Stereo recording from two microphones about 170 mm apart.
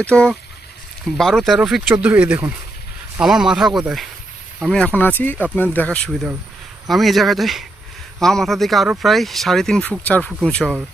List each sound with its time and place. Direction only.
0.0 s speech: 5° left (ahead or behind)